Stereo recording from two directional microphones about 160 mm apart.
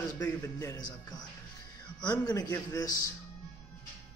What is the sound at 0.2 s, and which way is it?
A man's voice, 20° left (ahead or behind).